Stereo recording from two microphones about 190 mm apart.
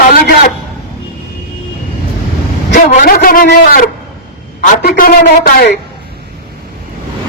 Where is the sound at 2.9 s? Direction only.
45° left (ahead or behind).